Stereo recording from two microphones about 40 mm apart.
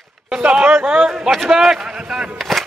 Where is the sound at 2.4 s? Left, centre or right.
Centre.